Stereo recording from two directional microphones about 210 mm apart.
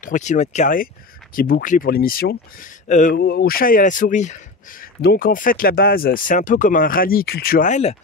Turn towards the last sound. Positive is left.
turn(degrees=35)  # may be behind; listen again after turning